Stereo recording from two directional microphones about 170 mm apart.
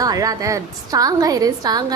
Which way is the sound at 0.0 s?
20° right (ahead or behind).